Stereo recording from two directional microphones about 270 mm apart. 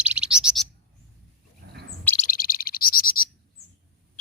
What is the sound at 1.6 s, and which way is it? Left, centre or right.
Bird, right.